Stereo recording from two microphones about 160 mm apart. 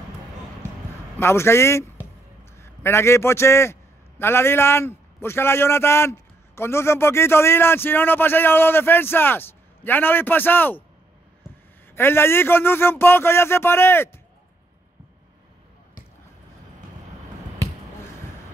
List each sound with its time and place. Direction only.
1.2 s a man's voice: 15° left (ahead or behind)
11.9 s a man's voice: 15° left (ahead or behind)